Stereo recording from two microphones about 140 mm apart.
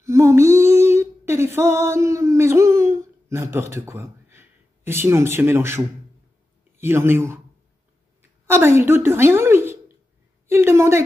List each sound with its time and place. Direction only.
0.0 s female singing: 20° right (ahead or behind)
3.7 s speech: 20° right (ahead or behind)
6.8 s a woman's voice: 15° right (ahead or behind)